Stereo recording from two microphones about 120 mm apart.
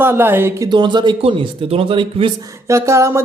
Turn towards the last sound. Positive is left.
turn(degrees=-25)  # may be behind; listen again after turning